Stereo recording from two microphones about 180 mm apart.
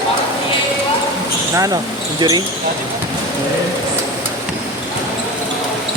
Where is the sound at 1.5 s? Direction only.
20° right (ahead or behind).